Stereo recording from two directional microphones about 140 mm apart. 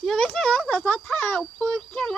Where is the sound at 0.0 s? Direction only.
5° left (ahead or behind).